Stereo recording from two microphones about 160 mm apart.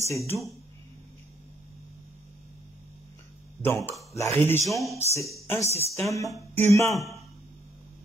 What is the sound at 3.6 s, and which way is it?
Speech, 15° left (ahead or behind).